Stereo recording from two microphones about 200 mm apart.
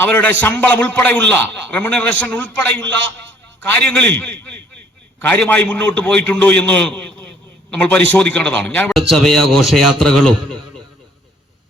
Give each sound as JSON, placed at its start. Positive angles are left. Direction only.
{"t": 0.0, "sound": "a man's voice", "side_deg": 10}